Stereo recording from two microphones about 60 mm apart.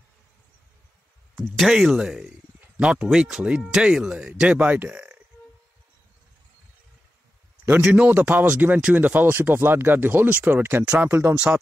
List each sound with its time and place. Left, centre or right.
1.4 s speech: centre
1.7 s speech: centre
3.1 s speech: centre; by 5.0 s right
7.8 s speech: right